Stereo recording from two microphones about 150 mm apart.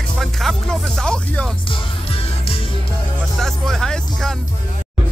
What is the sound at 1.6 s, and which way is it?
Music, 35° left (ahead or behind).